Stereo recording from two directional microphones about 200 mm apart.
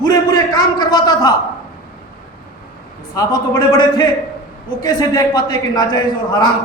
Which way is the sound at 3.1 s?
20° left (ahead or behind).